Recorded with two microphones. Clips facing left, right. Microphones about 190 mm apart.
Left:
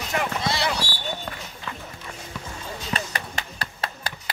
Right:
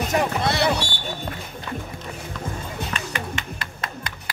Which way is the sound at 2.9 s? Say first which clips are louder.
Right 1 dB; 35° left (ahead or behind).